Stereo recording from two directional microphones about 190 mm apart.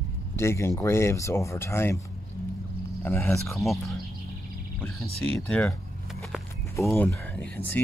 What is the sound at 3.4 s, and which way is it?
Speech, centre (ahead or behind).